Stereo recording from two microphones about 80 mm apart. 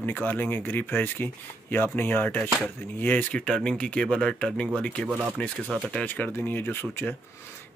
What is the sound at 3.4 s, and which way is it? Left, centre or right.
Speech, centre.